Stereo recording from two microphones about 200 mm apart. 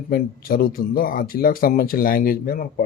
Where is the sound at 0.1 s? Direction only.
50° left (ahead or behind).